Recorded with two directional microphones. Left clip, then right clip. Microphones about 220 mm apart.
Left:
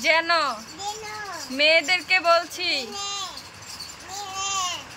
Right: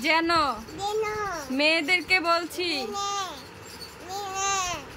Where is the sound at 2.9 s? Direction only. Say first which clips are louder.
Right 2 dB; 20° right (ahead or behind).